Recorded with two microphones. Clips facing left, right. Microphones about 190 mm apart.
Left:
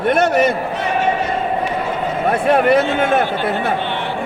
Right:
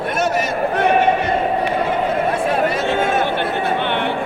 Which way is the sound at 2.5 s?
60° left (ahead or behind).